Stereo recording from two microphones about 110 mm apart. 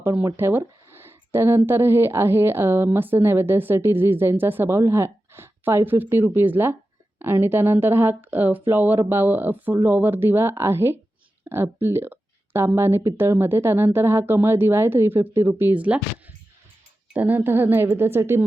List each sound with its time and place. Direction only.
0.3 s speech: 20° right (ahead or behind)